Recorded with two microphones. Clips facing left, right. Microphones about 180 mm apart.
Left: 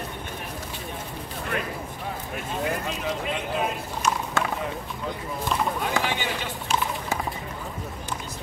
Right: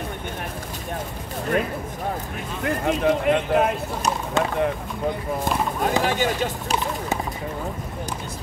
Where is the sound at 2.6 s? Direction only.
55° right (ahead or behind).